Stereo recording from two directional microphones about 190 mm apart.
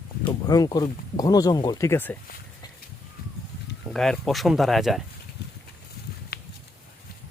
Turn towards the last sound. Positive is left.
turn(degrees=55)  # may be behind; listen again after turning